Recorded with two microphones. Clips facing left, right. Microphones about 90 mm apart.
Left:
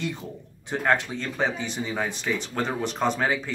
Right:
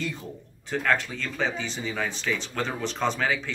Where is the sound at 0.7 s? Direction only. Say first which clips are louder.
Left 2 dB; 20° left (ahead or behind).